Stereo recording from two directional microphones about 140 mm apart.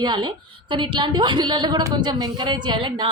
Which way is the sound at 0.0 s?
30° right (ahead or behind).